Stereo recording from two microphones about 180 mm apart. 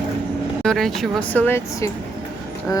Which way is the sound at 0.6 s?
Centre (ahead or behind).